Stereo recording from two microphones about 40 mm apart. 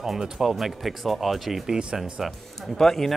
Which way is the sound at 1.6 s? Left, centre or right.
Centre.